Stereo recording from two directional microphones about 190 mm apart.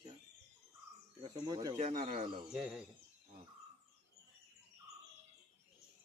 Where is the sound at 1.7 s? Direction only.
40° right (ahead or behind).